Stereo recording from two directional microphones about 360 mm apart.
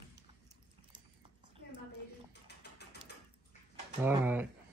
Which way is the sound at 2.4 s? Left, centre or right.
Left.